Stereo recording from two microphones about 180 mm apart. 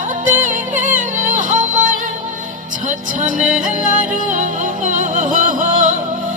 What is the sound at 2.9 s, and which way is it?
Music, 45° right (ahead or behind).